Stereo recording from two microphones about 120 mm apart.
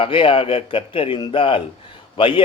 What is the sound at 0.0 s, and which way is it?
Speech, 45° left (ahead or behind).